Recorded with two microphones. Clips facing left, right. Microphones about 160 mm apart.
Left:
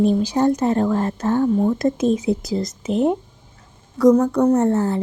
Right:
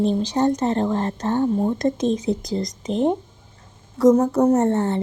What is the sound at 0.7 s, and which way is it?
Speech, 25° right (ahead or behind).